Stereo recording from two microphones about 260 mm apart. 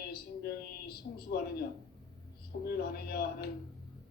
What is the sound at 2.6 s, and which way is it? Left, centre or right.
Speech, left.